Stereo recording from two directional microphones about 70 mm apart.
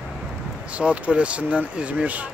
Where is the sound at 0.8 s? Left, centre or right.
Centre.